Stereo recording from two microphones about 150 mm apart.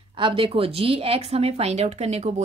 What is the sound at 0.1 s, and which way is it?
A woman's voice, 35° right (ahead or behind).